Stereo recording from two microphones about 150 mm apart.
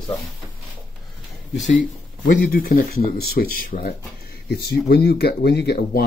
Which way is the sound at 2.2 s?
70° left (ahead or behind).